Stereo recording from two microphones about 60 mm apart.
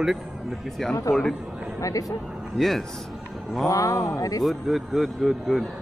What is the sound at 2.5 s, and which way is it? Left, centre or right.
Speech, centre.